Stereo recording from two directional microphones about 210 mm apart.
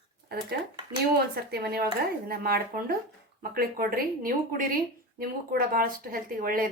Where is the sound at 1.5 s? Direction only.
45° right (ahead or behind).